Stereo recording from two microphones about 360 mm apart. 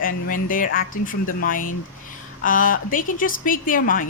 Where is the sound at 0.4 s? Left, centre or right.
Left.